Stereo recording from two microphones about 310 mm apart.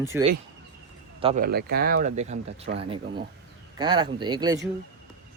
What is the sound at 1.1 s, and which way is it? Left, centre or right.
Speech, right.